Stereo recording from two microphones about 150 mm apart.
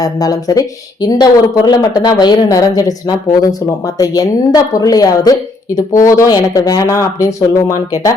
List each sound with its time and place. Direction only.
0.0 s a woman's voice: 25° left (ahead or behind)
3.9 s a woman's voice: 25° left (ahead or behind)